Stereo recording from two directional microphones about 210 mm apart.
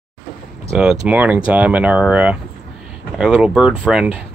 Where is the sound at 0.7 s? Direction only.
5° right (ahead or behind).